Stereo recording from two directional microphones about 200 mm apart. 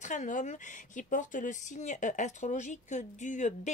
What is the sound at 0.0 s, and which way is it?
Speech, 40° left (ahead or behind).